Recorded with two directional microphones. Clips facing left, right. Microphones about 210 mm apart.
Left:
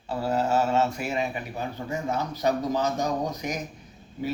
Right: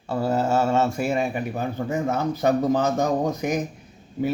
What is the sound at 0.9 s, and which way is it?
A man's voice, 50° right (ahead or behind).